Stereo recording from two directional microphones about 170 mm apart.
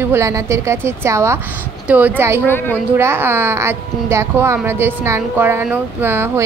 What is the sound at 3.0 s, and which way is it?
A woman's voice, 15° right (ahead or behind).